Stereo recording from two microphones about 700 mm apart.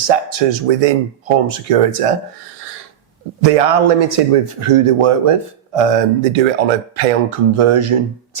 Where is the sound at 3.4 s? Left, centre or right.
Right.